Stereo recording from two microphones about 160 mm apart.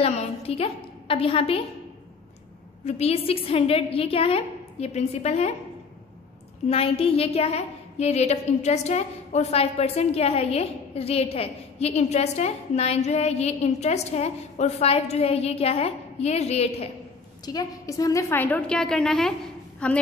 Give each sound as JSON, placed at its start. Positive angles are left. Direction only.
{"t": 0.0, "sound": "a woman's voice", "side_deg": 35}
{"t": 2.8, "sound": "a woman's voice", "side_deg": 45}
{"t": 6.7, "sound": "a woman's voice", "side_deg": 35}
{"t": 17.5, "sound": "a woman's voice", "side_deg": 20}